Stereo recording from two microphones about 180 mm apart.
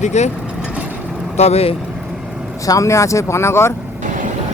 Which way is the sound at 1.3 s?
35° left (ahead or behind).